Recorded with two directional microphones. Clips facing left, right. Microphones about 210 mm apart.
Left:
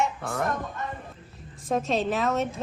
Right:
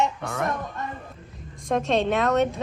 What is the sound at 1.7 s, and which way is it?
Speech, centre (ahead or behind).